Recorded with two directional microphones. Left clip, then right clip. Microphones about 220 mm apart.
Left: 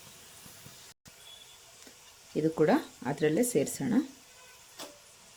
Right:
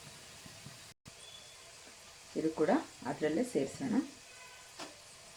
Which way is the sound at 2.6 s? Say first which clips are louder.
Left 5 dB; 50° left (ahead or behind).